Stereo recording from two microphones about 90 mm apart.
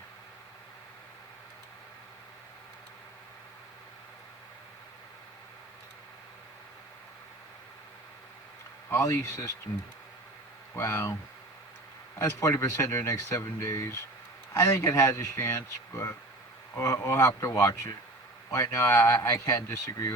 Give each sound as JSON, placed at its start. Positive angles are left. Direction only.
{"t": 8.9, "sound": "speech", "side_deg": 25}
{"t": 10.8, "sound": "speech", "side_deg": 30}
{"t": 12.2, "sound": "a man's voice", "side_deg": 35}